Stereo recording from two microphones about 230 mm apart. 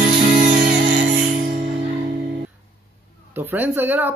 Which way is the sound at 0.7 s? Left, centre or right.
Right.